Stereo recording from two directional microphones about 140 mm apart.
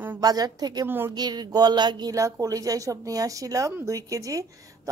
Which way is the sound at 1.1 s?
30° right (ahead or behind).